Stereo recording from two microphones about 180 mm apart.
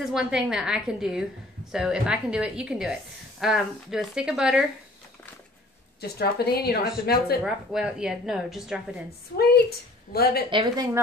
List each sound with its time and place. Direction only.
0.0 s a woman's voice: 5° right (ahead or behind)
5.9 s a woman's voice: 60° left (ahead or behind)
7.4 s a woman's voice: 5° right (ahead or behind)
9.4 s a woman's voice: 60° left (ahead or behind)
10.5 s a woman's voice: 25° right (ahead or behind)